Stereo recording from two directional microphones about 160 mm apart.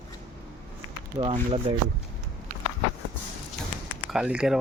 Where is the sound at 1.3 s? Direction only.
40° right (ahead or behind).